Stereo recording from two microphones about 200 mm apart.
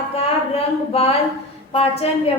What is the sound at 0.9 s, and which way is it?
A woman's voice, 30° left (ahead or behind).